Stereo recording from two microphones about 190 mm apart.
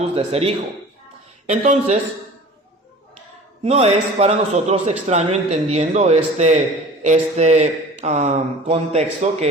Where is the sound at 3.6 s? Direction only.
35° right (ahead or behind).